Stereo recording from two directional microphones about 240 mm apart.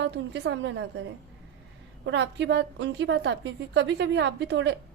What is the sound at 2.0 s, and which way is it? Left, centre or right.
A woman's voice, right.